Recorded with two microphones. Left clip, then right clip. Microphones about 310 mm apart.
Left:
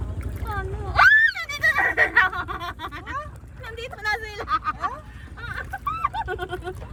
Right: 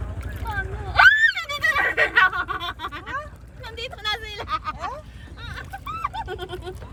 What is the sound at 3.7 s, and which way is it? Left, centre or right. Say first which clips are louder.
Vehicle: left 1 dB; centre.